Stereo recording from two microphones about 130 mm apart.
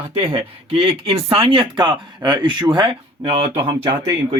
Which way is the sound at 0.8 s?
45° right (ahead or behind).